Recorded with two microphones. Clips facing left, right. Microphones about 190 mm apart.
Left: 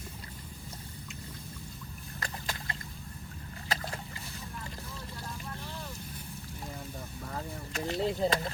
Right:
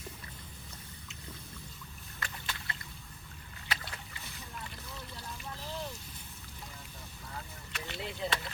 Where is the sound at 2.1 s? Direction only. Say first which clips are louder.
Left 4 dB; 40° left (ahead or behind).